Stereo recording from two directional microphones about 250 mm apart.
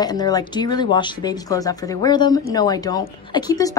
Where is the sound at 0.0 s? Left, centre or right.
Centre.